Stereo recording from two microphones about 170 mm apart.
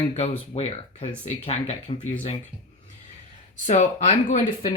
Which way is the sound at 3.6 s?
45° left (ahead or behind).